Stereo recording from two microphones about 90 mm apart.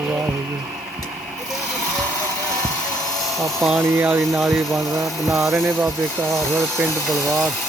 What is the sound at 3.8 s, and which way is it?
Speech, 25° right (ahead or behind).